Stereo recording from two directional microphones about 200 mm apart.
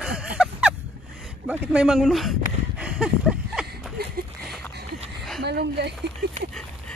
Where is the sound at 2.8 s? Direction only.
5° right (ahead or behind).